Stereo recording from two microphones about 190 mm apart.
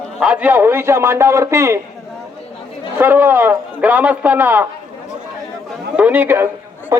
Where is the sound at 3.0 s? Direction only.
10° right (ahead or behind).